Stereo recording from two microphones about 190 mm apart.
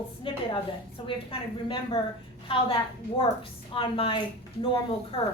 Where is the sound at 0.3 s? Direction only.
25° left (ahead or behind).